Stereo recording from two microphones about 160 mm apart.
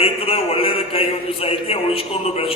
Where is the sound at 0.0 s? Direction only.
35° left (ahead or behind).